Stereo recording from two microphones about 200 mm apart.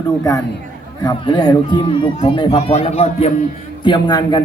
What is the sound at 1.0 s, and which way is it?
A man's voice, 20° left (ahead or behind).